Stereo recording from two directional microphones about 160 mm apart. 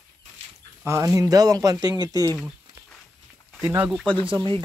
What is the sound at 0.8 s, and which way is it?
Speech, 20° right (ahead or behind).